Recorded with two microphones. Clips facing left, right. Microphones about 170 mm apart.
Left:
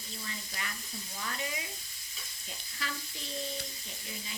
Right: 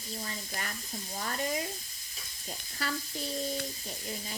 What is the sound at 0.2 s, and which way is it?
Sizzle, 45° right (ahead or behind).